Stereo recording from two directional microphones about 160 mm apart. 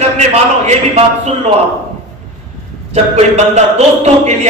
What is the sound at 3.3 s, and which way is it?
A man's voice, 45° right (ahead or behind).